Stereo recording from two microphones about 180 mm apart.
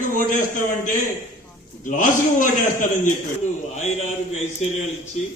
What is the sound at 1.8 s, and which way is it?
A man's voice, 45° left (ahead or behind).